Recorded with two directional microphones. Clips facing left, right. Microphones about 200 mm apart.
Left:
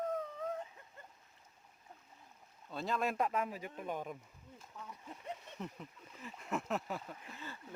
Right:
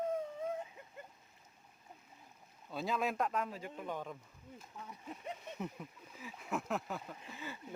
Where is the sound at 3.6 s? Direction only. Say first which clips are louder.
Left 1 dB; 15° left (ahead or behind).